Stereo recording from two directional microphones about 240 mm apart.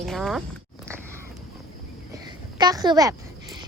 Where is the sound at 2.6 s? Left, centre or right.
Centre.